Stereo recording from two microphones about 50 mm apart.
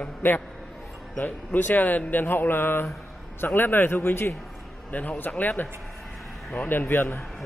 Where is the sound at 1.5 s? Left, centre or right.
Left.